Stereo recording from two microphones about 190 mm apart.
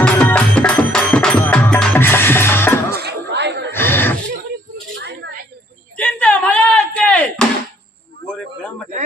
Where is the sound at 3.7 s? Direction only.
10° left (ahead or behind).